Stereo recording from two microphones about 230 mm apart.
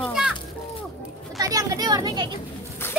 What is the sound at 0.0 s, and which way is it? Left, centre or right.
Children playing, centre.